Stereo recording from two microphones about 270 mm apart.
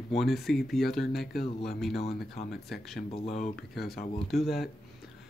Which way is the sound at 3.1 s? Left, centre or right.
Left.